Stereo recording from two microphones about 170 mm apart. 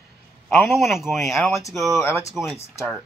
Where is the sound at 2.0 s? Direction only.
15° left (ahead or behind).